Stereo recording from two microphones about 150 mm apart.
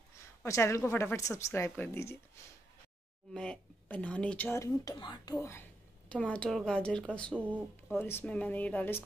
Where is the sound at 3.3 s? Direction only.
5° left (ahead or behind); by 5.4 s 25° left (ahead or behind).